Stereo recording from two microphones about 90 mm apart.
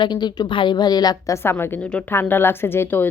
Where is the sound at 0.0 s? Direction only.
55° left (ahead or behind).